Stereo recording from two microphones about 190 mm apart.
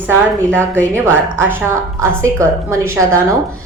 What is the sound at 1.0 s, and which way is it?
A woman's voice, 10° right (ahead or behind).